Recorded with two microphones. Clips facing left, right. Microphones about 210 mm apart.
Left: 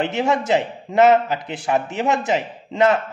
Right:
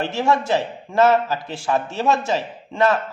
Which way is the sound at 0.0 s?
20° left (ahead or behind).